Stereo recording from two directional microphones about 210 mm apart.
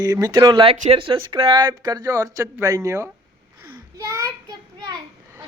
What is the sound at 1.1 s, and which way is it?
Speech, 25° right (ahead or behind).